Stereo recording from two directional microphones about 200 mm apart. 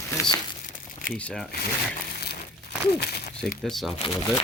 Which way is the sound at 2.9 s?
55° left (ahead or behind).